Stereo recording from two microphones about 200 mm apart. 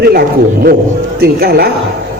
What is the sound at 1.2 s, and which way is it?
Speech, 50° right (ahead or behind).